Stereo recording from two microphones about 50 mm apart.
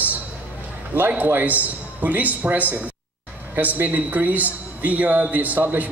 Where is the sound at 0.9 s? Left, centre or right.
Right.